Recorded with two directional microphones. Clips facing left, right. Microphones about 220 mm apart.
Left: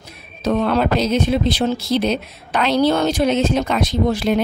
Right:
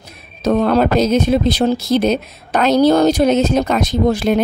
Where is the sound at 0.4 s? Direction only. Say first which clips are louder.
Right 4 dB; 40° right (ahead or behind).